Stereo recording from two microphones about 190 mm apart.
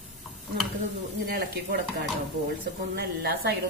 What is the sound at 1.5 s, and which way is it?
Speech, 55° right (ahead or behind).